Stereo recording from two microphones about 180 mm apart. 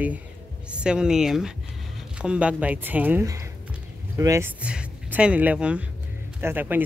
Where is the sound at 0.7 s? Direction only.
5° right (ahead or behind).